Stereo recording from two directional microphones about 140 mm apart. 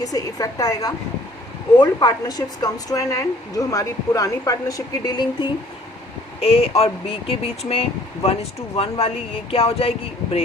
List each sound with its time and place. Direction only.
0.0 s a woman's voice: 25° left (ahead or behind)
6.4 s speech: 45° left (ahead or behind)